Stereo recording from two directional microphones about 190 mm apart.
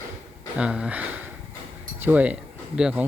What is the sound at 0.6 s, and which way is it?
Speech, 5° right (ahead or behind).